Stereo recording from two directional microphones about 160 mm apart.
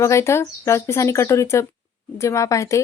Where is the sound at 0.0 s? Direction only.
20° left (ahead or behind).